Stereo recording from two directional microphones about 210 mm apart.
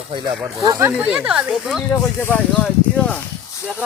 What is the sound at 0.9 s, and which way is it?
Speech, 5° right (ahead or behind).